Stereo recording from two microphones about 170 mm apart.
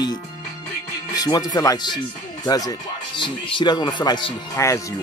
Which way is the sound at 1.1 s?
20° left (ahead or behind).